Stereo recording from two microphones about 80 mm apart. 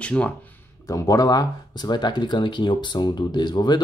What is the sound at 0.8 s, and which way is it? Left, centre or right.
Speech, left.